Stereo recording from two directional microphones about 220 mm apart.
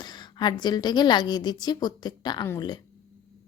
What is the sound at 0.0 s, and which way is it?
A woman's voice, 20° left (ahead or behind).